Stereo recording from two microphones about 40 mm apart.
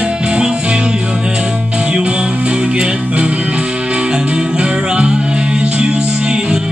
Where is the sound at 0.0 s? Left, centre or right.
Right.